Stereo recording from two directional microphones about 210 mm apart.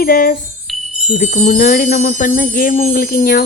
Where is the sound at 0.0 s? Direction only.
45° left (ahead or behind).